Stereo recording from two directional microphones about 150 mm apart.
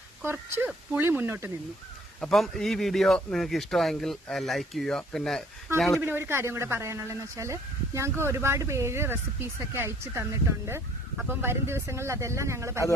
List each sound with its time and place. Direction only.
0.2 s speech: 15° right (ahead or behind)
2.1 s a man's voice: centre (ahead or behind)
5.9 s speech: 15° right (ahead or behind)